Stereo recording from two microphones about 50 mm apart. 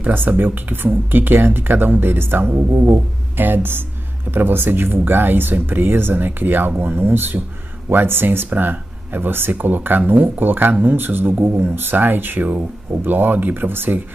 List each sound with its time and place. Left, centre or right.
0.0 s speech: right